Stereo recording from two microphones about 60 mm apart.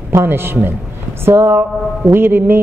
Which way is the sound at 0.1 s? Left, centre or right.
Right.